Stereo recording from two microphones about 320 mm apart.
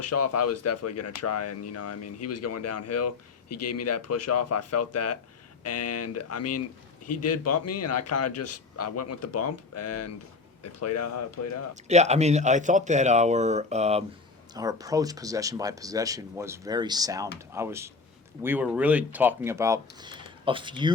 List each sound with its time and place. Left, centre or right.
0.0 s speech: left
11.9 s speech: right